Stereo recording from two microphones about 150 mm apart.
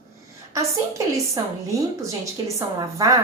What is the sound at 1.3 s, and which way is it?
A woman's voice, 20° right (ahead or behind).